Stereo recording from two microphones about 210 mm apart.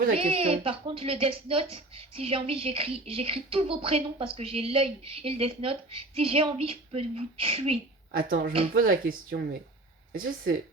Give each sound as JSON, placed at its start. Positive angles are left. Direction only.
{"t": 0.2, "sound": "speech", "side_deg": -25}
{"t": 8.1, "sound": "speech", "side_deg": -45}